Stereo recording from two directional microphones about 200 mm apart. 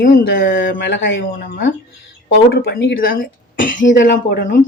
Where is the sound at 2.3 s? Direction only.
50° left (ahead or behind).